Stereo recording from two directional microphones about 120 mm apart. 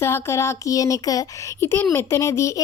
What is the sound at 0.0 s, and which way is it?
A child's voice, 20° left (ahead or behind).